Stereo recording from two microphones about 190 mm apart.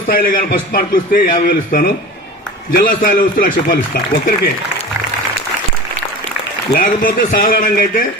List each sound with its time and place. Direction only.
0.1 s a man's voice: 50° left (ahead or behind)
6.7 s a man's voice: 45° left (ahead or behind)